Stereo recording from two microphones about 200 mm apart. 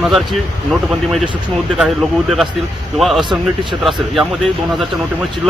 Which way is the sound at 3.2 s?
25° right (ahead or behind).